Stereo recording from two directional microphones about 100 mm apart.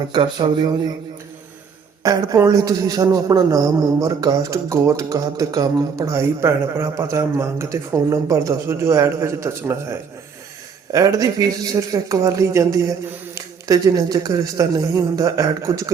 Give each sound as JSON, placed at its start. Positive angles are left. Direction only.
{"t": 0.1, "sound": "speech", "side_deg": -50}
{"t": 2.0, "sound": "a man's voice", "side_deg": -35}
{"t": 10.9, "sound": "a man's voice", "side_deg": -35}